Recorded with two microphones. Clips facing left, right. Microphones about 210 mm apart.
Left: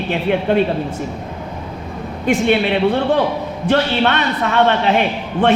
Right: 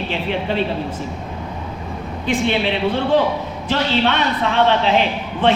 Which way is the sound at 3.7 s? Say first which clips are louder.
Left 3 dB; 55° left (ahead or behind).